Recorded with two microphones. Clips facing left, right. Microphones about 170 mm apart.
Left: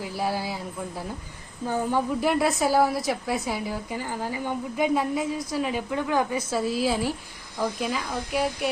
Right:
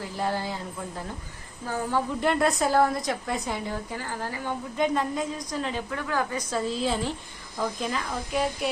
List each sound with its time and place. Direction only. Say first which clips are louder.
0.0 s a woman's voice: left 1 dB; 10° left (ahead or behind)
2.2 s a woman's voice: right 1 dB; 5° left (ahead or behind)
5.9 s a woman's voice: left 5 dB; 20° left (ahead or behind)
6.5 s a woman's voice: left 1 dB; 10° left (ahead or behind)